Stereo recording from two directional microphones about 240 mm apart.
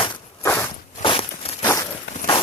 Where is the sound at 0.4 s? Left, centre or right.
Centre.